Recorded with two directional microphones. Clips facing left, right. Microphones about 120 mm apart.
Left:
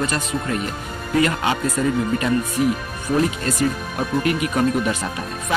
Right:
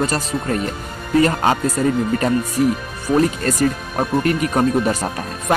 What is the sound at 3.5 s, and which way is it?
Speech, 40° right (ahead or behind).